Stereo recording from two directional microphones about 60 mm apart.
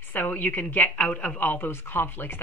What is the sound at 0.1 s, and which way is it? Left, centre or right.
A woman's voice, left.